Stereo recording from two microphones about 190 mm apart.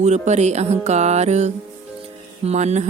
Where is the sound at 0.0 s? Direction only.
35° right (ahead or behind).